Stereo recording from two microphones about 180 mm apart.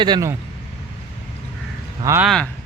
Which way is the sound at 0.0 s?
20° right (ahead or behind).